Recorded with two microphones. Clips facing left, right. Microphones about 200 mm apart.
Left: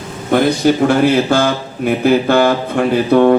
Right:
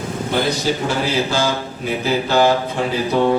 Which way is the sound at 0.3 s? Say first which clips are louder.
Left 8 dB; 55° left (ahead or behind).